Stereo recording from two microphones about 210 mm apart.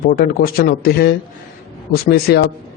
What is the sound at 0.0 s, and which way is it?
A man's voice, 45° left (ahead or behind).